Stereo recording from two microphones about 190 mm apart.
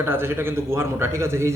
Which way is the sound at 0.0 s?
10° right (ahead or behind).